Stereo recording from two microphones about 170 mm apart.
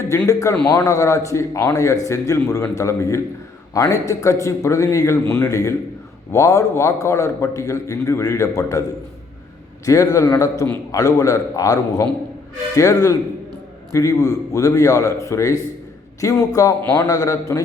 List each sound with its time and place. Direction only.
0.1 s a man's voice: 20° left (ahead or behind)
9.8 s a man's voice: 20° left (ahead or behind)